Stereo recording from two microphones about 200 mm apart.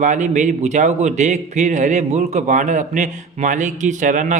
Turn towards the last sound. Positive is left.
turn(degrees=-40)  # may be behind; listen again after turning